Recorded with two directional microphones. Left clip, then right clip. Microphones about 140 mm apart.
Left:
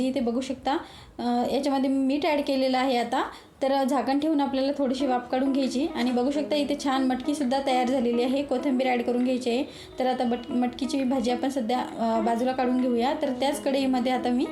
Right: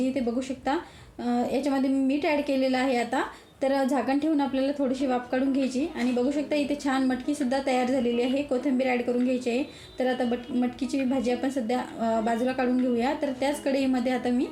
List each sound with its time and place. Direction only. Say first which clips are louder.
0.0 s a woman's voice: left 1 dB; 25° left (ahead or behind)
10.0 s a woman's voice: left 1 dB; 30° left (ahead or behind)